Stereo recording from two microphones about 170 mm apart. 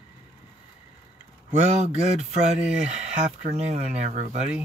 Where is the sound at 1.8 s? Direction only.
40° right (ahead or behind).